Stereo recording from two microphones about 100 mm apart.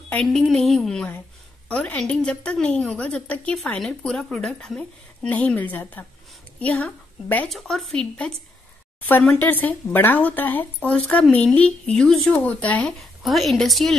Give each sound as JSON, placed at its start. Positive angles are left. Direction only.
{"t": 0.2, "sound": "a woman's voice", "side_deg": 5}
{"t": 7.4, "sound": "speech", "side_deg": 5}
{"t": 9.0, "sound": "a woman's voice", "side_deg": 20}
{"t": 13.2, "sound": "speech", "side_deg": 0}